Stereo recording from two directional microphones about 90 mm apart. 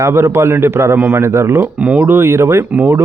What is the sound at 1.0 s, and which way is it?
Speech, 15° right (ahead or behind).